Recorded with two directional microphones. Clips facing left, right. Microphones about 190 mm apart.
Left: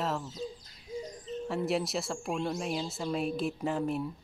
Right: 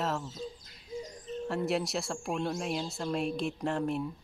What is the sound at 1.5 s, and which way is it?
Speech, centre (ahead or behind).